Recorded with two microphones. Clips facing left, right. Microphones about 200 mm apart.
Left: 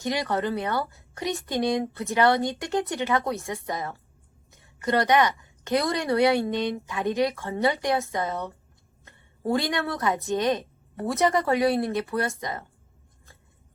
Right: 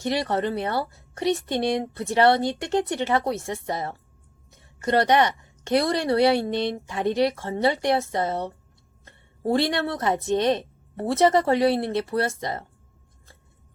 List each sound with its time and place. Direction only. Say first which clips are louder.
0.1 s a woman's voice: right 2 dB; 30° right (ahead or behind)